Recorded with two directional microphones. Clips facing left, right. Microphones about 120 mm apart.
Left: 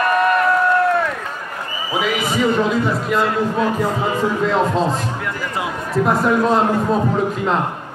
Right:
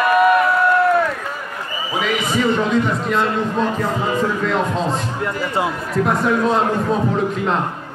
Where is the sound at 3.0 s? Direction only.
5° left (ahead or behind).